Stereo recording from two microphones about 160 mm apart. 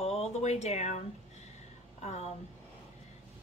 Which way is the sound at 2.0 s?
45° left (ahead or behind).